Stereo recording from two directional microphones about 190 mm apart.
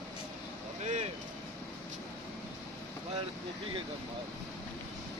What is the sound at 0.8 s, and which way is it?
Vehicle, 40° right (ahead or behind).